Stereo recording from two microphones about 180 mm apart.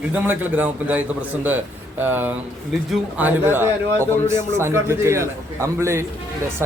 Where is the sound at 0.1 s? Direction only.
10° right (ahead or behind).